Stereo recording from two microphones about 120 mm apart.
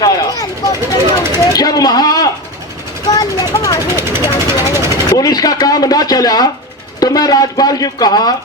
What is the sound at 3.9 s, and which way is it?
Speech, 20° right (ahead or behind).